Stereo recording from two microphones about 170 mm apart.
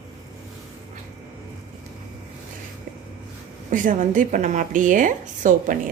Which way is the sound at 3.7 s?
50° right (ahead or behind).